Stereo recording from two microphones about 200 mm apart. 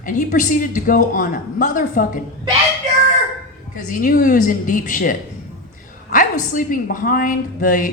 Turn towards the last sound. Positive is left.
turn(degrees=40)  # may be behind; listen again after turning